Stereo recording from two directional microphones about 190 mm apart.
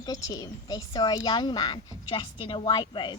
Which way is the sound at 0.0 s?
20° left (ahead or behind).